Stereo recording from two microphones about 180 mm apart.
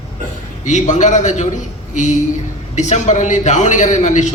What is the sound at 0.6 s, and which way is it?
A man's voice, 40° left (ahead or behind).